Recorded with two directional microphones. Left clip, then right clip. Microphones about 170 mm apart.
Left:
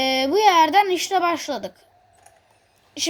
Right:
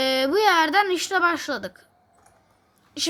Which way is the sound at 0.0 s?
15° right (ahead or behind).